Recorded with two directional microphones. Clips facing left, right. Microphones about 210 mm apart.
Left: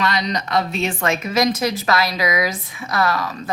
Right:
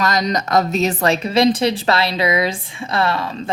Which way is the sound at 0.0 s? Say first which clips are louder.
Right 3 dB; 45° right (ahead or behind).